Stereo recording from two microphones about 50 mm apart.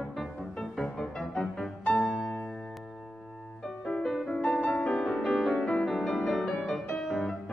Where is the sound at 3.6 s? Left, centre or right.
Centre.